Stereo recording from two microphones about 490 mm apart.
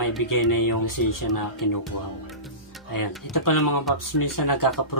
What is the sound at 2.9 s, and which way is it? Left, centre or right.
Speech, left.